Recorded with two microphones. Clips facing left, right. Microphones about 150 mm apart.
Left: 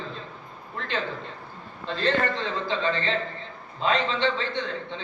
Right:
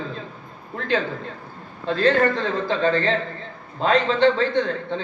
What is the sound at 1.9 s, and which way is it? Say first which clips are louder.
A man's voice: right 7 dB; 45° right (ahead or behind).